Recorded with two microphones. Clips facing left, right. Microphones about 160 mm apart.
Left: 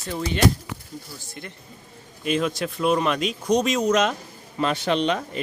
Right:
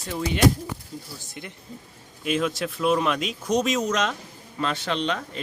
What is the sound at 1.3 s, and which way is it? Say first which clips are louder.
Speech: left 1 dB; 15° right (ahead or behind).